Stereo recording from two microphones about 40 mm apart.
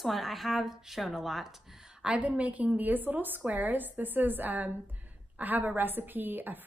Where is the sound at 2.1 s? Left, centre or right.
Right.